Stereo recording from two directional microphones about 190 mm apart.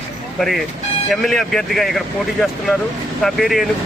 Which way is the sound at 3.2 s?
Centre (ahead or behind).